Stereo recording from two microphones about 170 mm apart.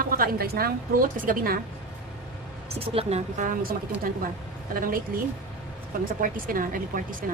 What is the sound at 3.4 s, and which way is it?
Speech, 50° right (ahead or behind).